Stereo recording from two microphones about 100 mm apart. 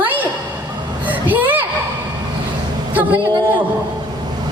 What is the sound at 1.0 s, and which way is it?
Children playing, 15° right (ahead or behind).